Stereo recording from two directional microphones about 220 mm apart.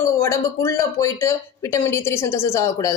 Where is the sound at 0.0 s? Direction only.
15° left (ahead or behind).